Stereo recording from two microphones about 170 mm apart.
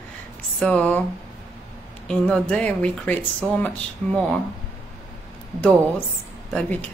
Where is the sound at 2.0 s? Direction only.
5° left (ahead or behind).